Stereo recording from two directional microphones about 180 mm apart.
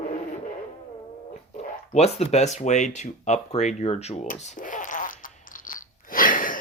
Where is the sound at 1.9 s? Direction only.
40° left (ahead or behind).